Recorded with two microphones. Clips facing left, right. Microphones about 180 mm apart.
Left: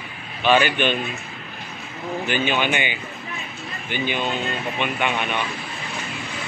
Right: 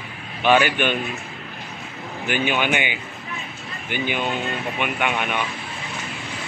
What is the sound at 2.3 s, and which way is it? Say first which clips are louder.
A man's voice: right 1 dB; 10° right (ahead or behind).